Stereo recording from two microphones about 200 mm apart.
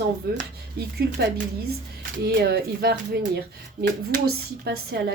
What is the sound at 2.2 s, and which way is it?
Speech, 50° right (ahead or behind).